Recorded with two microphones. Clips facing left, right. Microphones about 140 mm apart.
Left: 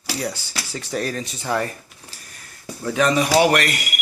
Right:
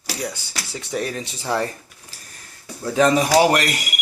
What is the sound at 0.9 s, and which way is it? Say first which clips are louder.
Speech: even; 20° right (ahead or behind).